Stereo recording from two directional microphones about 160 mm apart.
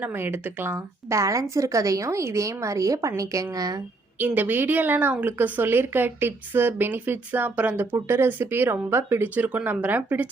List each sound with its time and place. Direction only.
0.0 s a woman's voice: 15° right (ahead or behind)
4.2 s a woman's voice: 10° right (ahead or behind)